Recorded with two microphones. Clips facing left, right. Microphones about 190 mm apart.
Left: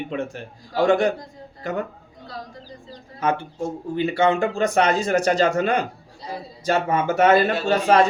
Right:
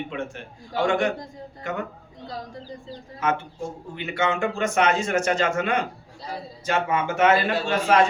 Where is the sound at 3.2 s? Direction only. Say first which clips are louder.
Left 3 dB; 35° left (ahead or behind).